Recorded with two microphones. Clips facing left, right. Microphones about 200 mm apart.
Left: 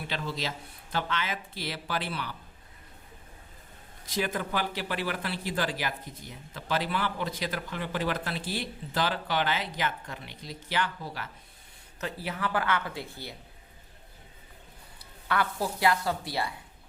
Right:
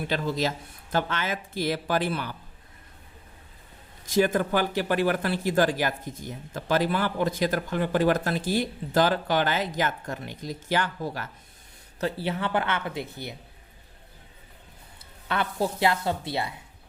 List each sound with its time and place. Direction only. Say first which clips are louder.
0.1 s speech: right 7 dB; 45° right (ahead or behind)
4.0 s speech: right 8 dB; 45° right (ahead or behind)
11.9 s speech: right 6 dB; 30° right (ahead or behind)
15.3 s speech: right 2 dB; 25° right (ahead or behind)